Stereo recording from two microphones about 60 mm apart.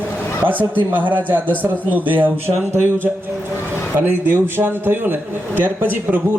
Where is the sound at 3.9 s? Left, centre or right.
Right.